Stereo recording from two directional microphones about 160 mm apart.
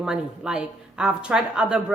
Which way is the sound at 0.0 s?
5° right (ahead or behind).